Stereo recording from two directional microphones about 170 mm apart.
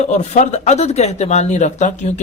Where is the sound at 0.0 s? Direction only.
40° left (ahead or behind).